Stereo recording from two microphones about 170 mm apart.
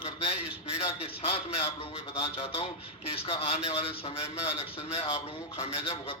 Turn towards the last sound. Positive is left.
turn(degrees=35)  # may be behind; listen again after turning